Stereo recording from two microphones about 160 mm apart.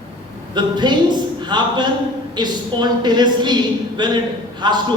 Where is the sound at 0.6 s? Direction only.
30° right (ahead or behind).